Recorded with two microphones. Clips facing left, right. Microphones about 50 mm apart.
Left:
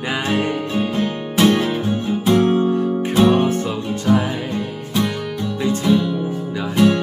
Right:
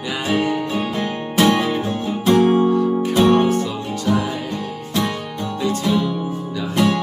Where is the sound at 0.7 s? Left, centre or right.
Centre.